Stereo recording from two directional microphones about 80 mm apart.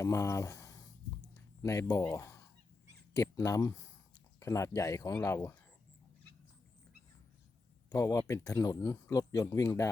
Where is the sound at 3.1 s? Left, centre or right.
Left.